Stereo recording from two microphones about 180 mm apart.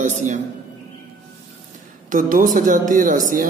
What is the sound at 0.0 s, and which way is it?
Speech, 40° right (ahead or behind).